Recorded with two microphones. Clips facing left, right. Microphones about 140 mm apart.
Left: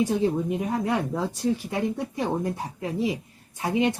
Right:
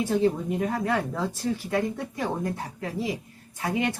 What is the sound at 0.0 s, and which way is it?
A woman's voice, 20° left (ahead or behind).